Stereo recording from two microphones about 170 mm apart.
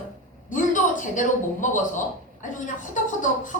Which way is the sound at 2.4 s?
50° left (ahead or behind).